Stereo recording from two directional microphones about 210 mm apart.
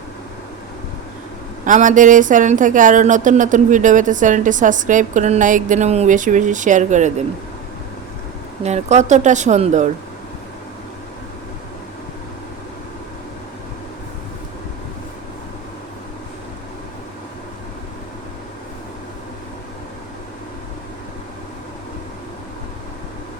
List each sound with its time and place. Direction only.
1.6 s speech: 35° right (ahead or behind)
8.6 s speech: 30° right (ahead or behind)